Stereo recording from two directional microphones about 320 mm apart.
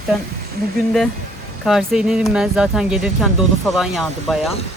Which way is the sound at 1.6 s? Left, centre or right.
Centre.